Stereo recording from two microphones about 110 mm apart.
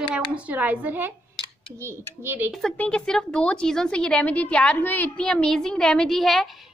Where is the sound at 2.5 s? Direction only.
5° left (ahead or behind).